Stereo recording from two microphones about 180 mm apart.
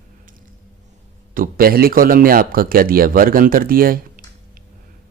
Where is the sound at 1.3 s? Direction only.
50° right (ahead or behind).